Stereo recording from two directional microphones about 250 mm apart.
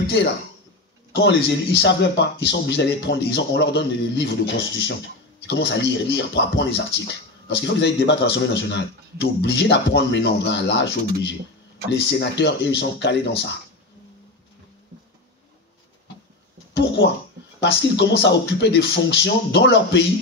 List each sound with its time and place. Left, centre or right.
0.0 s speech: left
5.5 s speech: left
16.7 s speech: left